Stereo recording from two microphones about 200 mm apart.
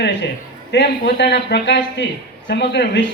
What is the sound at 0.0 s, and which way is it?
A man's voice, 65° left (ahead or behind).